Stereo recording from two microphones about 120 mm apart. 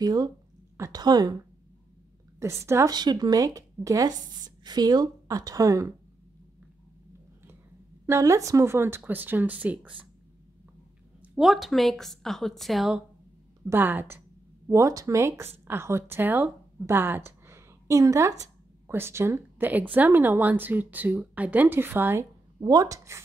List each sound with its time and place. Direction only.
0.0 s speech: 35° right (ahead or behind)
2.4 s a woman's voice: 25° right (ahead or behind)
2.9 s a woman's voice: 35° right (ahead or behind)
8.1 s speech: 25° right (ahead or behind)
11.3 s a woman's voice: centre (ahead or behind)
13.7 s a woman's voice: 15° right (ahead or behind)
22.6 s a woman's voice: 30° right (ahead or behind)